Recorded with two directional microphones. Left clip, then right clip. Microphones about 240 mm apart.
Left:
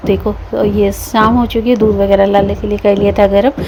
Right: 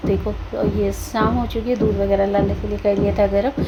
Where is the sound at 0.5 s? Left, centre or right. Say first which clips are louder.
Left 8 dB; left.